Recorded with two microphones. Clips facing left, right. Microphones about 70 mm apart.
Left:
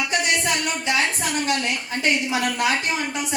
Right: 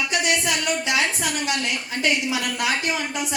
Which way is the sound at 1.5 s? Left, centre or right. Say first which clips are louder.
Left 2 dB; left.